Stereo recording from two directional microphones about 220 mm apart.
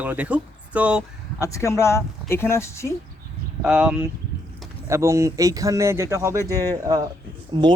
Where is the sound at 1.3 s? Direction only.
15° left (ahead or behind).